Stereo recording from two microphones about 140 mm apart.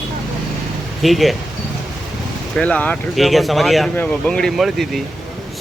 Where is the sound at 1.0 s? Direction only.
Centre (ahead or behind).